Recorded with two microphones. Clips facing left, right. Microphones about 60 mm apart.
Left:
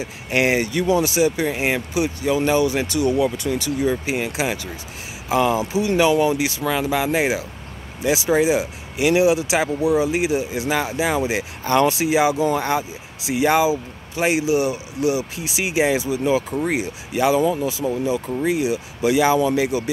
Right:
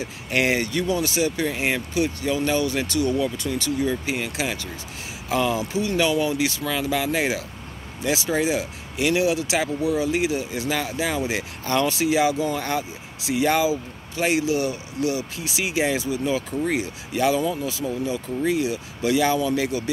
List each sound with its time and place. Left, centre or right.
0.0 s speech: centre